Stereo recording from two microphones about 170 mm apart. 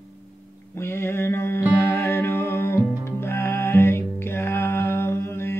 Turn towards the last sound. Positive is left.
turn(degrees=15)  # may be behind; listen again after turning